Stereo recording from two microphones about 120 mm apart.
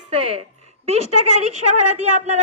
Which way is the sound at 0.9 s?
65° right (ahead or behind).